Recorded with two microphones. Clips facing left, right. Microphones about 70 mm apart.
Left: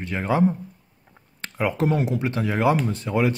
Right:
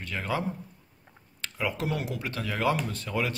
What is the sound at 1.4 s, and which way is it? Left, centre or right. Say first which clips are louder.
Speech: left 8 dB; left.